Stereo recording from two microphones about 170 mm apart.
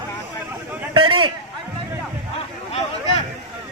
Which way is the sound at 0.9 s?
30° right (ahead or behind).